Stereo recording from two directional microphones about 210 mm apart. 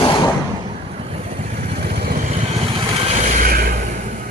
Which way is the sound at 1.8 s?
45° right (ahead or behind).